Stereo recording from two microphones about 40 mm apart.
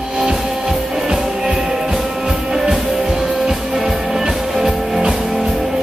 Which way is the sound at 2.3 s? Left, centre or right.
Right.